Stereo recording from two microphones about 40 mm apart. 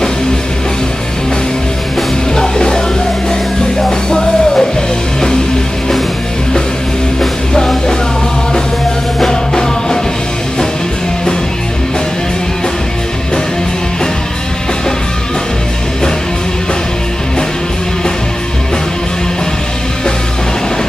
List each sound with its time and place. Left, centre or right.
2.3 s music: centre
4.1 s music: centre
7.2 s music: centre
9.2 s music: centre